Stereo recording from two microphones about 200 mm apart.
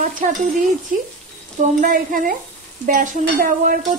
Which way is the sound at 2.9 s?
40° right (ahead or behind).